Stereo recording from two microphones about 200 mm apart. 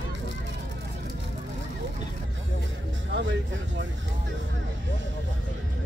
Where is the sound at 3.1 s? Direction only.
70° right (ahead or behind).